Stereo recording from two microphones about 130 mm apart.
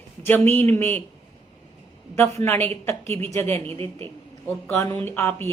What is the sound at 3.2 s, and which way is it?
Speech, 15° left (ahead or behind).